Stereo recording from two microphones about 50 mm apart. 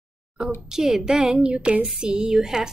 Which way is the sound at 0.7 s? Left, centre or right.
Centre.